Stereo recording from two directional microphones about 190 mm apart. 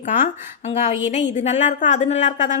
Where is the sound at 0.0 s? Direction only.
40° left (ahead or behind).